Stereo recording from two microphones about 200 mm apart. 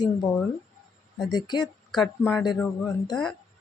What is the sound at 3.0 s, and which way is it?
Speech, 20° left (ahead or behind).